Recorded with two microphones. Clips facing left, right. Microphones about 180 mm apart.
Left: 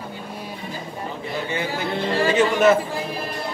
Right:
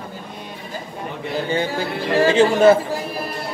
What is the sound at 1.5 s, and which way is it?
Speech, 35° right (ahead or behind).